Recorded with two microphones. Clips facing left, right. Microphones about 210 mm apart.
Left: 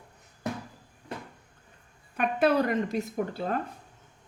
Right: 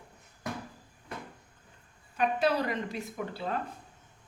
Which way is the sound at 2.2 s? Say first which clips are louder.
Left 4 dB; 55° left (ahead or behind).